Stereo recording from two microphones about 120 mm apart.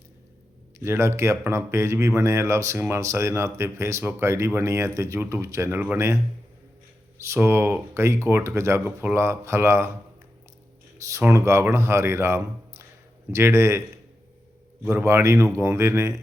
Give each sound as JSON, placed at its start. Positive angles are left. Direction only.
{"t": 0.8, "sound": "speech", "side_deg": -20}
{"t": 7.2, "sound": "speech", "side_deg": -20}
{"t": 10.9, "sound": "speech", "side_deg": -25}
{"t": 14.8, "sound": "speech", "side_deg": -20}